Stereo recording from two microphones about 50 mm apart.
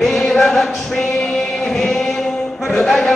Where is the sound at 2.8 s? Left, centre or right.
Centre.